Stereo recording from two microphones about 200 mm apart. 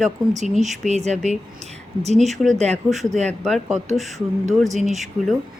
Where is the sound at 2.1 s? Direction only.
Centre (ahead or behind).